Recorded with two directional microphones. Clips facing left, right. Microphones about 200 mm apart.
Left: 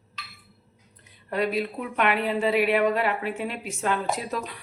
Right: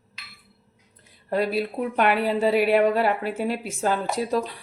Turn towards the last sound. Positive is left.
turn(degrees=-35)  # may be behind; listen again after turning